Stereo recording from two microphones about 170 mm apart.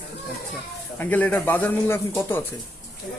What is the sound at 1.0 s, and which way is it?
Speech, 10° left (ahead or behind).